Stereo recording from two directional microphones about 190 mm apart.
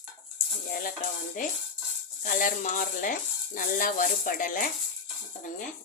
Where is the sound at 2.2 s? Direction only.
45° left (ahead or behind).